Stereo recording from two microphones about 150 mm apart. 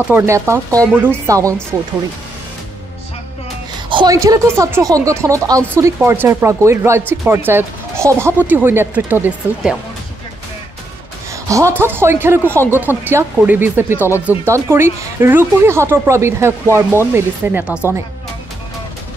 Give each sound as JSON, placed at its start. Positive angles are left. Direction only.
{"t": 0.1, "sound": "speech", "side_deg": -15}
{"t": 3.9, "sound": "speech", "side_deg": -25}
{"t": 11.4, "sound": "speech", "side_deg": -20}